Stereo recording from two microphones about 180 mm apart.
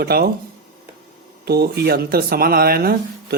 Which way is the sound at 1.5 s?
60° right (ahead or behind).